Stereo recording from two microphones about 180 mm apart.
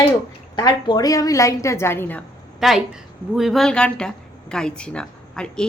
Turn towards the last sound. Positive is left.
turn(degrees=5)  # may be behind; listen again after turning